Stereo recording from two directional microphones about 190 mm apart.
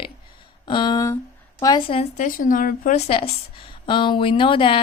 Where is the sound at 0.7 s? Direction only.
25° left (ahead or behind).